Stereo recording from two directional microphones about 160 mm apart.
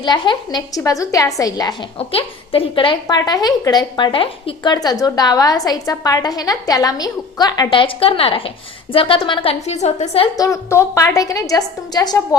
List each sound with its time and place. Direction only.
0.0 s a woman's voice: 30° left (ahead or behind)
2.0 s a woman's voice: 35° left (ahead or behind)
10.3 s a woman's voice: 20° left (ahead or behind)